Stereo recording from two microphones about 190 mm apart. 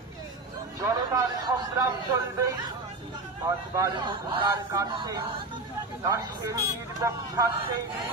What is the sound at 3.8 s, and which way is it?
A man's voice, 20° right (ahead or behind).